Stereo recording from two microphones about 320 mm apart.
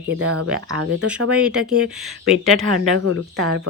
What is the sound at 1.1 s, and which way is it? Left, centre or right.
Speech, centre.